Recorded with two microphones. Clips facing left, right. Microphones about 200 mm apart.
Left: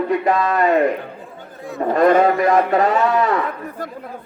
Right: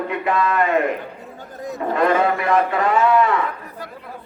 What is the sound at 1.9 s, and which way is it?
A man's voice, 40° left (ahead or behind).